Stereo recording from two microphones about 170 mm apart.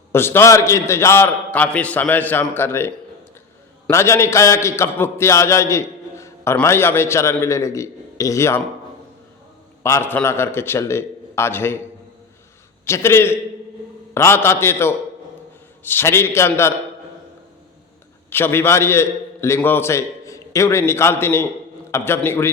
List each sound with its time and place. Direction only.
0.1 s a man's voice: 15° left (ahead or behind)
9.8 s a man's voice: 15° left (ahead or behind)
12.8 s a man's voice: 15° left (ahead or behind)
18.3 s a man's voice: 15° left (ahead or behind)